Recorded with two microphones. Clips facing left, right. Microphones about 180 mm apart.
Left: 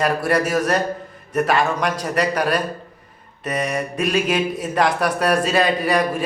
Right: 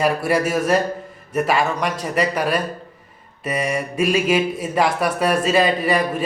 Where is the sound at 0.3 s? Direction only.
5° right (ahead or behind).